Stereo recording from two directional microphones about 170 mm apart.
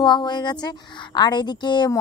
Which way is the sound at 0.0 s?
25° left (ahead or behind).